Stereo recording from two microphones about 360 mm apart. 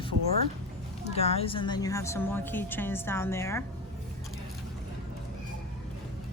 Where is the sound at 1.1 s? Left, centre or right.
Centre.